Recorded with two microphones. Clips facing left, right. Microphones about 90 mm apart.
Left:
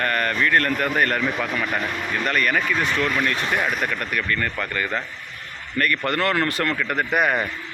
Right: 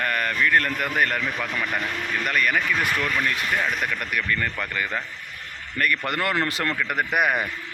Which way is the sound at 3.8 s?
5° right (ahead or behind).